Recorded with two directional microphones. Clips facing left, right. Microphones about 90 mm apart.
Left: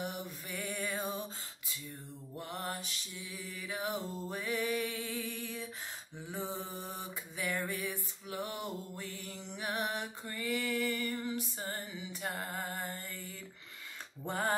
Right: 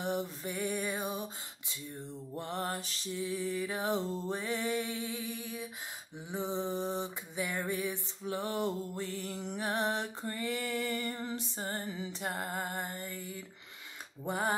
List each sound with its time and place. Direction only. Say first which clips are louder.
0.0 s music: right 6 dB; 25° right (ahead or behind)
2.3 s music: right 4 dB; 30° right (ahead or behind)
11.9 s music: right 4 dB; 40° right (ahead or behind)
12.3 s music: right 2 dB; 25° right (ahead or behind)
14.2 s a sound: right 2 dB; 15° right (ahead or behind)